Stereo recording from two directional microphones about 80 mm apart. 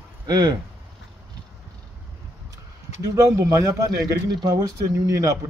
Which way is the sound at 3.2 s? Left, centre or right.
Right.